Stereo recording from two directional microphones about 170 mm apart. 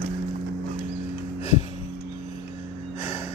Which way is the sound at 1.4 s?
40° left (ahead or behind).